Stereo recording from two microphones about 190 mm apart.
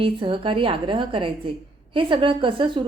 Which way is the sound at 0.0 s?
25° right (ahead or behind).